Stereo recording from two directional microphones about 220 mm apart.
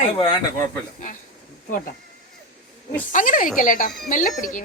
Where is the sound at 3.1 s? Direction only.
35° left (ahead or behind).